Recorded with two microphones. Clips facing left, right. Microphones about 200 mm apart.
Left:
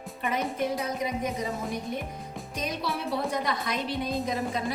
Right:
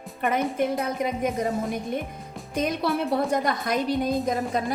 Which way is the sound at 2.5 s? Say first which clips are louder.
Right 8 dB; 55° right (ahead or behind).